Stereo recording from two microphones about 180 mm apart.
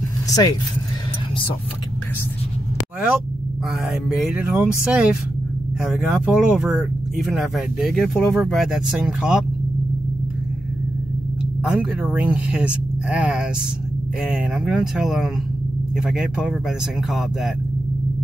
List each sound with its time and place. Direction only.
0.3 s speech: 20° left (ahead or behind)
3.9 s speech: 5° right (ahead or behind)
11.7 s speech: 5° right (ahead or behind)